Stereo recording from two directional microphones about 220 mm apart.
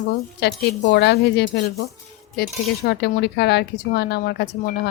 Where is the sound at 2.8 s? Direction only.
50° left (ahead or behind).